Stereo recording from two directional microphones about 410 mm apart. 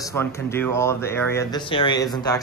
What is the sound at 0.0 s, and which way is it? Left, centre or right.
Speech, centre.